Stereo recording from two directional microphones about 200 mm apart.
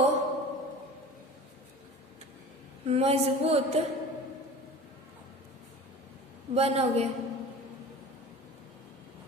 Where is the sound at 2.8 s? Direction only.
30° right (ahead or behind).